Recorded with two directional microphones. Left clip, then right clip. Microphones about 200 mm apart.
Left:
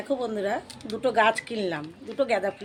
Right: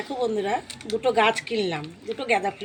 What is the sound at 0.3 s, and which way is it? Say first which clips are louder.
A woman's voice: right 2 dB; 25° left (ahead or behind).